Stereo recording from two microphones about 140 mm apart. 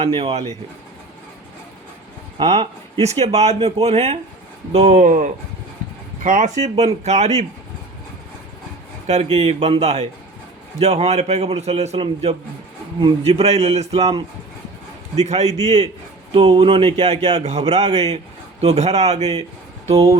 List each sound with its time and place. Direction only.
0.0 s a man's voice: 45° right (ahead or behind)
2.5 s a man's voice: 45° right (ahead or behind)
4.9 s speech: 65° right (ahead or behind)
6.2 s speech: 75° right (ahead or behind)
6.6 s a man's voice: 50° right (ahead or behind)
9.0 s a man's voice: 50° right (ahead or behind)
16.3 s a man's voice: 40° right (ahead or behind)